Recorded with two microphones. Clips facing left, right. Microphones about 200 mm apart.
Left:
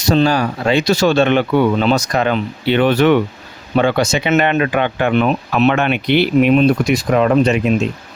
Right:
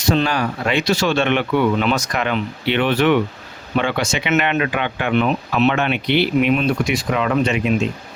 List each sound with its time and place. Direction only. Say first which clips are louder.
0.0 s speech: left 4 dB; 35° left (ahead or behind)
6.5 s speech: left 6 dB; 35° left (ahead or behind)